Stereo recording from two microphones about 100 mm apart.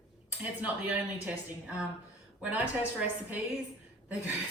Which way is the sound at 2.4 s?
15° right (ahead or behind).